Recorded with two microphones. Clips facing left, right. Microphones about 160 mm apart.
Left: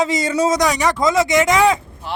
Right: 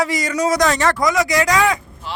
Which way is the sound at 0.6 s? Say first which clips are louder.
Right 1 dB; 15° left (ahead or behind).